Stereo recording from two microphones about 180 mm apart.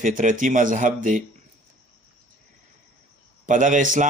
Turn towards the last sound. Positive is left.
turn(degrees=-45)  # may be behind; listen again after turning